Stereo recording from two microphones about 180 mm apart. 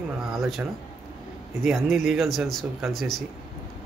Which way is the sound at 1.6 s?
Centre (ahead or behind).